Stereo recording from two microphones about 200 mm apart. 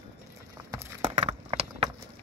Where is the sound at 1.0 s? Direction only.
30° right (ahead or behind).